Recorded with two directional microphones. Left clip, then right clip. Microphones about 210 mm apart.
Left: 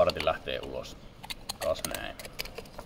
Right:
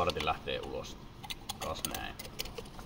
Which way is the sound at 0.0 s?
60° left (ahead or behind).